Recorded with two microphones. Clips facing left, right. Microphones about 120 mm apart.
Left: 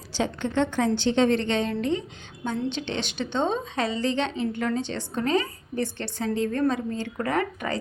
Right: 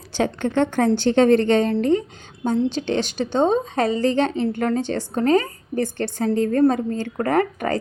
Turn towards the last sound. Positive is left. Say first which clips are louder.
# right 6 dB
turn(degrees=-45)  # may be behind; listen again after turning